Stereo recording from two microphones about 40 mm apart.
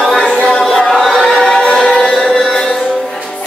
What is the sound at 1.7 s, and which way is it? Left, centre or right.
Music, centre.